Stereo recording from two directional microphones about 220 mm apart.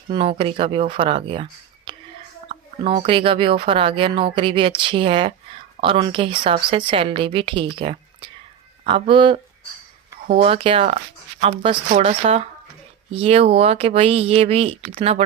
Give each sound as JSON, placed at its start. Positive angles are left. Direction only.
{"t": 0.1, "sound": "speech", "side_deg": -25}